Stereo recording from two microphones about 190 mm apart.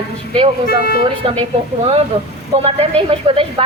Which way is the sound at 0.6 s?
50° left (ahead or behind).